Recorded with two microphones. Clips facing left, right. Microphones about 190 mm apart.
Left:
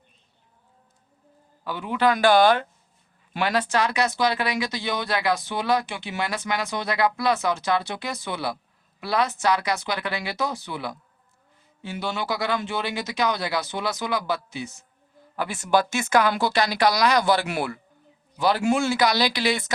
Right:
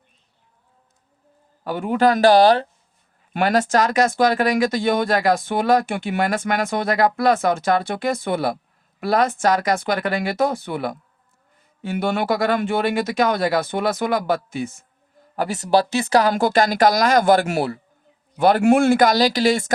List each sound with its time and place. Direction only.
1.6 s speech: 45° right (ahead or behind)
15.4 s speech: 40° right (ahead or behind)
18.3 s speech: 55° right (ahead or behind)